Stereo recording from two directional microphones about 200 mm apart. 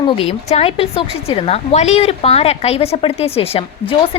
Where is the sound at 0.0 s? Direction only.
25° left (ahead or behind).